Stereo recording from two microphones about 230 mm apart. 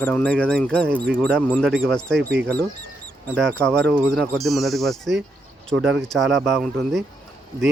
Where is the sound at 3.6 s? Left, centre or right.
Centre.